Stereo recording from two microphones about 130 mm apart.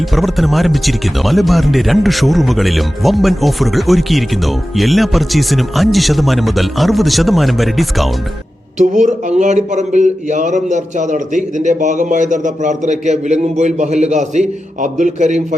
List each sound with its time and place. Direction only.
0.1 s speech: centre (ahead or behind)
8.8 s speech: 70° right (ahead or behind)